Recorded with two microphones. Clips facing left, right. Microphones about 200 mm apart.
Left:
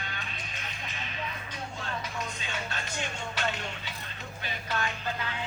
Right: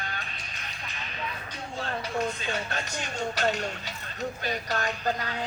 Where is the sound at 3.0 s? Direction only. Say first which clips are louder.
Right 5 dB; 40° right (ahead or behind).